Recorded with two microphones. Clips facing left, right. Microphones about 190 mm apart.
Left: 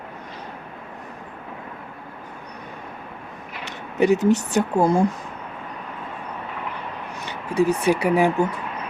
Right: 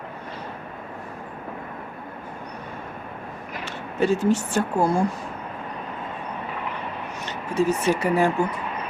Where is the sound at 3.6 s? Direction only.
15° left (ahead or behind).